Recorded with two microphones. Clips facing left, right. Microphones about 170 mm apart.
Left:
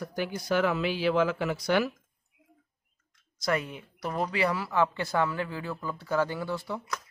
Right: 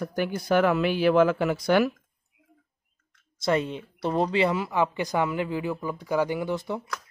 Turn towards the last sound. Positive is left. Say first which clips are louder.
# right 5 dB
turn(degrees=-20)  # may be behind; listen again after turning